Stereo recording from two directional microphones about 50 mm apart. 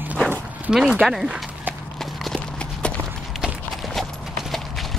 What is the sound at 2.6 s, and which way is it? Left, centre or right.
Clip-clop, left.